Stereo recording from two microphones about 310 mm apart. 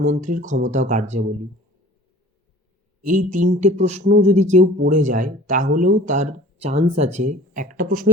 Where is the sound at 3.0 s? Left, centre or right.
Right.